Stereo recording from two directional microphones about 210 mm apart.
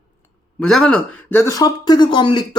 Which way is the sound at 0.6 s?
5° left (ahead or behind).